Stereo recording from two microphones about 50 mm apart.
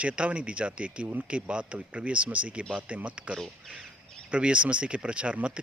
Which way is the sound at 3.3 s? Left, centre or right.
Centre.